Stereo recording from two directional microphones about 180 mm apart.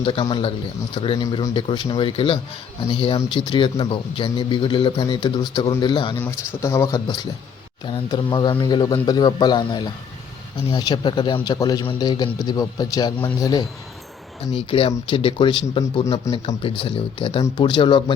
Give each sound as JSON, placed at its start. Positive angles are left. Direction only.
{"t": 0.0, "sound": "speech", "side_deg": 30}
{"t": 6.1, "sound": "speech", "side_deg": 10}
{"t": 13.1, "sound": "speech", "side_deg": 10}
{"t": 14.5, "sound": "speech", "side_deg": 35}
{"t": 16.2, "sound": "speech", "side_deg": 15}
{"t": 16.6, "sound": "speech", "side_deg": 30}